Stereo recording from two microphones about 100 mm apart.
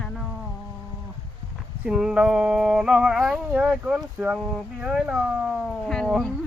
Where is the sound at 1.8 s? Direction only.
5° right (ahead or behind).